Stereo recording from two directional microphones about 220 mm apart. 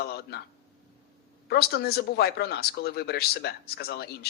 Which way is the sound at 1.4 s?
45° left (ahead or behind).